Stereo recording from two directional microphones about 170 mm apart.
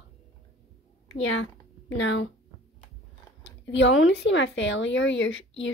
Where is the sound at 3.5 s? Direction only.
90° left.